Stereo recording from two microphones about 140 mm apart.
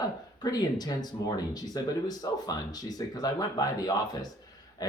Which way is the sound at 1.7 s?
30° left (ahead or behind).